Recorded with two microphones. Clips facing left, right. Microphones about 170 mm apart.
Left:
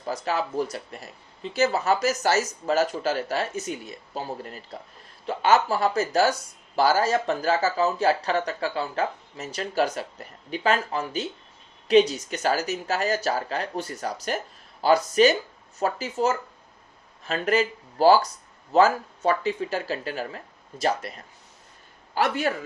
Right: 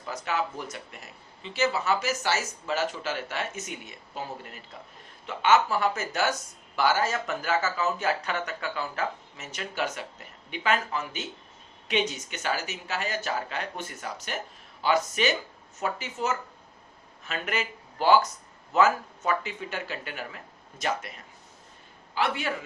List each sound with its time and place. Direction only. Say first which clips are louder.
0.0 s speech: left 3 dB; 35° left (ahead or behind)
22.1 s a man's voice: left 4 dB; 40° left (ahead or behind)